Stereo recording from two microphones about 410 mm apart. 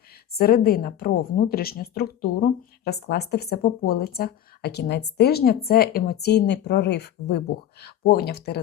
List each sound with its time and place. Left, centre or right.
0.3 s a woman's voice: left